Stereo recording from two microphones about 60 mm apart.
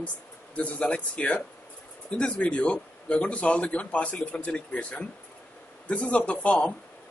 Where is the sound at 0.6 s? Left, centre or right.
Left.